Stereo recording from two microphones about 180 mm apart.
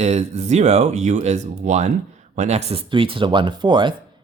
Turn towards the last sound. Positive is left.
turn(degrees=-25)  # may be behind; listen again after turning